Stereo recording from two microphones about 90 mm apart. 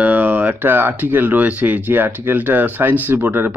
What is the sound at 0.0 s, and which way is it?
Speech, 20° right (ahead or behind).